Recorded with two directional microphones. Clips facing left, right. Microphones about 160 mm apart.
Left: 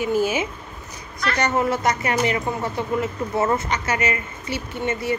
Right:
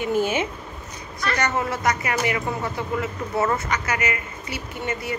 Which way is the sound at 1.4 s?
25° left (ahead or behind).